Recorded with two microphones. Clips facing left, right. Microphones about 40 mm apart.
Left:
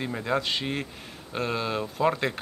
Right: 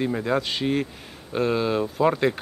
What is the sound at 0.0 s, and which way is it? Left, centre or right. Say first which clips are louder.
Speech: right 4 dB; centre.